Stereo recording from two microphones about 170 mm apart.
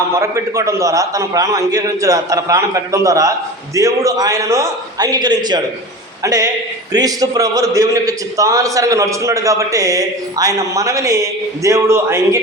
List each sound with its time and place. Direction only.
0.1 s a man's voice: 15° right (ahead or behind)